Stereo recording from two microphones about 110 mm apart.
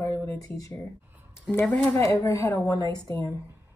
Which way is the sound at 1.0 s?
20° right (ahead or behind).